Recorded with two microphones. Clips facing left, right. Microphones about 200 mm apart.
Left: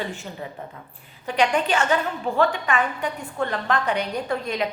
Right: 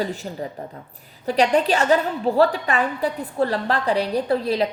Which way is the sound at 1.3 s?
35° right (ahead or behind).